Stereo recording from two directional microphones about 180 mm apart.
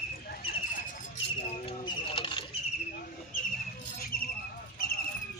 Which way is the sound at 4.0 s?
55° left (ahead or behind).